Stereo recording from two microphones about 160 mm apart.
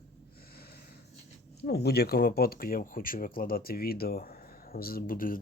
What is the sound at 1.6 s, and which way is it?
Speech, 90° left.